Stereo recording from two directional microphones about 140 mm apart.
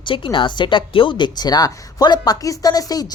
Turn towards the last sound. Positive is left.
turn(degrees=25)  # may be behind; listen again after turning